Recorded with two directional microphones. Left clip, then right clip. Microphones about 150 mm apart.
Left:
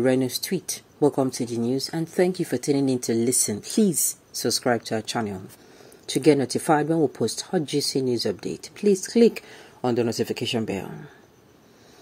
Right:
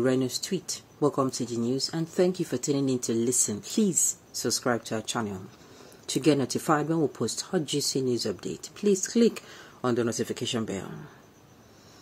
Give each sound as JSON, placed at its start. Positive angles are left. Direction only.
{"t": 0.0, "sound": "speech", "side_deg": 15}
{"t": 6.0, "sound": "speech", "side_deg": 10}